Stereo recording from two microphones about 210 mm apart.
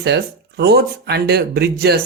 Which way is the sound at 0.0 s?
50° right (ahead or behind).